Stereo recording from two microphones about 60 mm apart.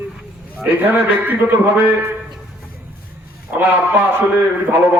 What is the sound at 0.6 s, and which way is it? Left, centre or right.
A man's voice, right.